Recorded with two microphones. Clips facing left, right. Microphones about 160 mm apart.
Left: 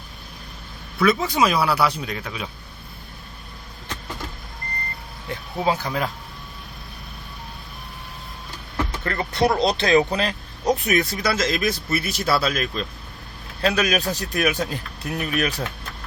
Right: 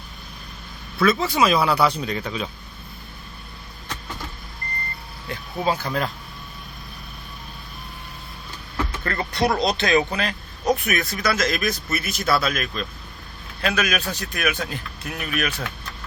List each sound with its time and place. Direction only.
1.0 s speech: 15° left (ahead or behind)
5.3 s speech: 15° left (ahead or behind)
9.0 s speech: 25° left (ahead or behind)